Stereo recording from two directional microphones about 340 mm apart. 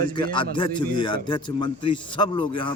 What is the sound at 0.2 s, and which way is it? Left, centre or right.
A man's voice, centre.